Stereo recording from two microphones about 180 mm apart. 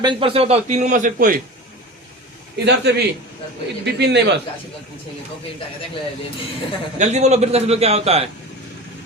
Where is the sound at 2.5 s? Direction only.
70° right (ahead or behind).